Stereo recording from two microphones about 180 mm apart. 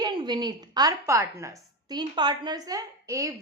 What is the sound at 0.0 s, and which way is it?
A woman's voice, 25° right (ahead or behind).